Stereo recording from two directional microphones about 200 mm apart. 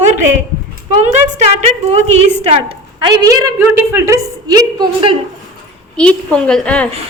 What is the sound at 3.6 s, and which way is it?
A woman's voice, 10° right (ahead or behind).